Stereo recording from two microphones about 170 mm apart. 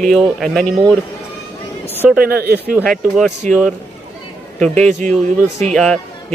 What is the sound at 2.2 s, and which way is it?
Speech, 65° right (ahead or behind).